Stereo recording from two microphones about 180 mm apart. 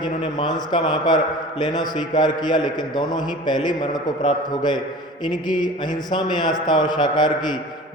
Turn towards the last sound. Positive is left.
turn(degrees=25)  # may be behind; listen again after turning